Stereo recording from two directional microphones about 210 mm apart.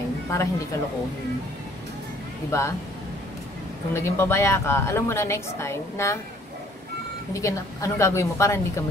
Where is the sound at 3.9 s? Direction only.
15° left (ahead or behind).